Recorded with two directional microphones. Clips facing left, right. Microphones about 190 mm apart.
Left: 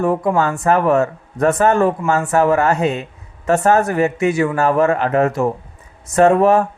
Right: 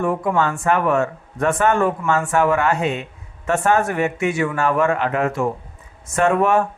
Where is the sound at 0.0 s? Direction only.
35° left (ahead or behind).